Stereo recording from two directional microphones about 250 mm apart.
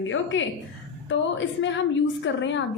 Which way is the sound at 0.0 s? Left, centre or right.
Left.